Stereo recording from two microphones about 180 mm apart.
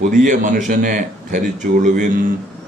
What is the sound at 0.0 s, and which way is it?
Speech, 45° right (ahead or behind).